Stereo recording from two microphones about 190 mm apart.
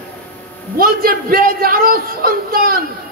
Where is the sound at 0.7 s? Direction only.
50° right (ahead or behind).